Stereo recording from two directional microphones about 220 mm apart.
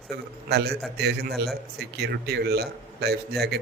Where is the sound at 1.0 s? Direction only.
50° right (ahead or behind).